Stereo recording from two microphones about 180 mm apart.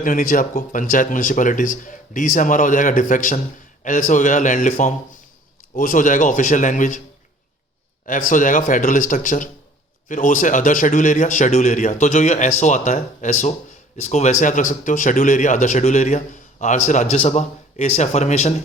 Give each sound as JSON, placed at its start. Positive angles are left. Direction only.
{"t": 0.0, "sound": "a man's voice", "side_deg": 50}
{"t": 8.0, "sound": "a man's voice", "side_deg": 50}